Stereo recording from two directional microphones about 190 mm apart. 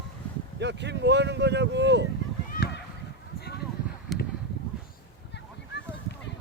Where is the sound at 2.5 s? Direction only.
60° left (ahead or behind).